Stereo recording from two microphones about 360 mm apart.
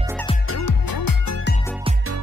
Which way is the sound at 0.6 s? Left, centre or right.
Left.